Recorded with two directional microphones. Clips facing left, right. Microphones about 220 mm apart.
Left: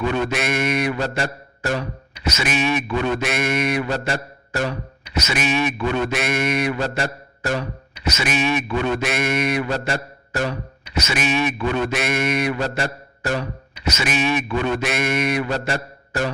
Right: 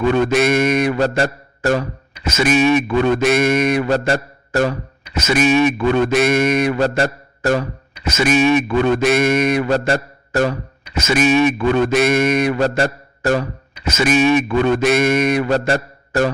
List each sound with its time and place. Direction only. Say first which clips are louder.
0.3 s a man's voice: right 7 dB; 45° right (ahead or behind)
9.8 s a man's voice: right 6 dB; 40° right (ahead or behind)